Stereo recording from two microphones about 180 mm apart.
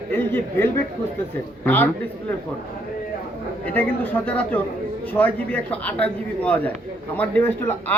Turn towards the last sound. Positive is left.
turn(degrees=10)  # may be behind; listen again after turning